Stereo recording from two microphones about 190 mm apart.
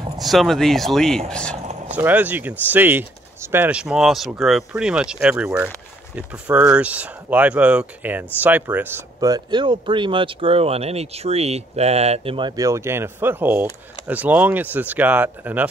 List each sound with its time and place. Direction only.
0.2 s speech: centre (ahead or behind)
1.9 s speech: 10° right (ahead or behind)